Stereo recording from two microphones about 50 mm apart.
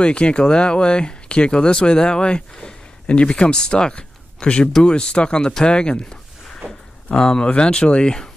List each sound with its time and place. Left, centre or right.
0.0 s speech: left